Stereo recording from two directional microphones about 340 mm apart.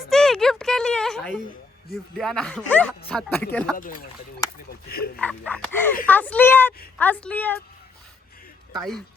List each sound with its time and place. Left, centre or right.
0.1 s a sound: centre
1.9 s speech: centre
3.8 s speech: left
5.2 s speech: centre